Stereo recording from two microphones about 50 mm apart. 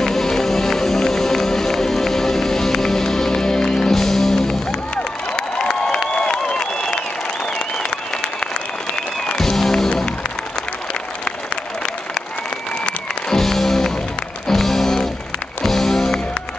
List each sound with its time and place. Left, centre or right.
0.0 s music: centre
4.9 s a sound: centre
7.5 s applause: centre
8.9 s music: centre
12.8 s music: centre
13.4 s music: centre